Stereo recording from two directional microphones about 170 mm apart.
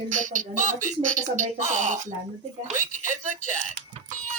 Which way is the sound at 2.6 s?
50° right (ahead or behind).